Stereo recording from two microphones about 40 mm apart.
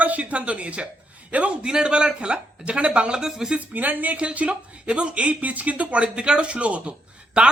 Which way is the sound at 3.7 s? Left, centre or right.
Right.